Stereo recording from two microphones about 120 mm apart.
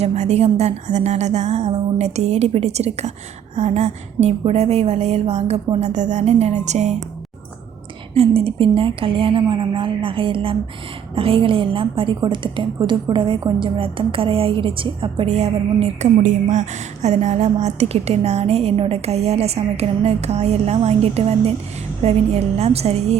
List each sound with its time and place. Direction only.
0.0 s a woman's voice: 65° right (ahead or behind)
5.8 s a woman's voice: 75° right (ahead or behind)
8.1 s a woman's voice: 55° right (ahead or behind)
15.3 s a woman's voice: 65° right (ahead or behind)